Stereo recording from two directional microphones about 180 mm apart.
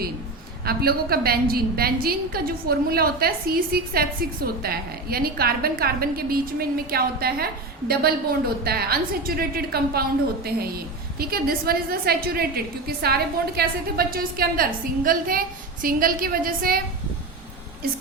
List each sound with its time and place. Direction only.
0.6 s a woman's voice: 60° right (ahead or behind)
11.2 s a woman's voice: 55° right (ahead or behind)